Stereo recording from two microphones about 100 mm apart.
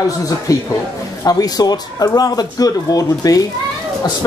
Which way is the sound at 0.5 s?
35° left (ahead or behind).